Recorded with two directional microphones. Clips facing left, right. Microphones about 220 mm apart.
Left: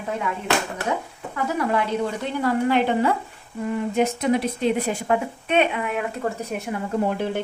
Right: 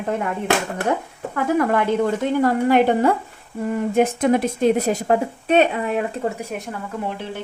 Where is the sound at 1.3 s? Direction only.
50° right (ahead or behind); by 6.3 s 30° right (ahead or behind).